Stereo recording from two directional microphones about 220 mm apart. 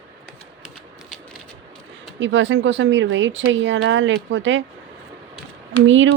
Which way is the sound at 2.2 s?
55° right (ahead or behind).